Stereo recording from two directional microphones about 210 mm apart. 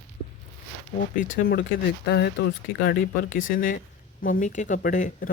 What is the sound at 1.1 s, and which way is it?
Speech, 45° left (ahead or behind).